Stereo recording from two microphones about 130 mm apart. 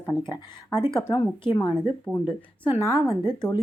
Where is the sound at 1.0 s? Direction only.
20° left (ahead or behind).